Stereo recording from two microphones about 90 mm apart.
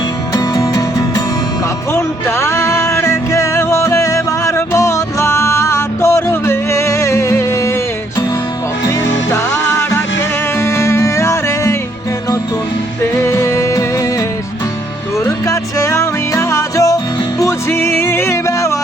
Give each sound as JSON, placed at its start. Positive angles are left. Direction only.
{"t": 0.3, "sound": "music", "side_deg": 40}
{"t": 1.9, "sound": "music", "side_deg": 30}
{"t": 8.9, "sound": "music", "side_deg": 35}
{"t": 13.1, "sound": "music", "side_deg": 35}
{"t": 15.2, "sound": "music", "side_deg": 35}
{"t": 17.4, "sound": "music", "side_deg": 25}